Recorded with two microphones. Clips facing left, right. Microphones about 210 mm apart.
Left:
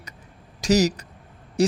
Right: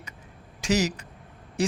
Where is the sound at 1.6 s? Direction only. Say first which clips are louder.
Left 6 dB; 40° left (ahead or behind).